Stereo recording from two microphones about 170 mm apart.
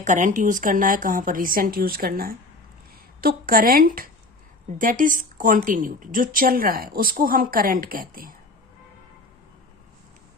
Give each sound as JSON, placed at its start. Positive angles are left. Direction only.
{"t": 0.0, "sound": "a woman's voice", "side_deg": -45}